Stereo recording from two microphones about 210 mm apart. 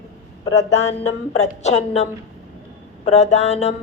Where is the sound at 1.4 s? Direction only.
30° left (ahead or behind).